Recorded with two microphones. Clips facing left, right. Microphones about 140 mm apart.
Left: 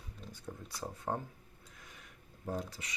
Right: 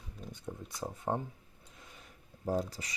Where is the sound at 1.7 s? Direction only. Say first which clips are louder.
Right 2 dB; 30° right (ahead or behind).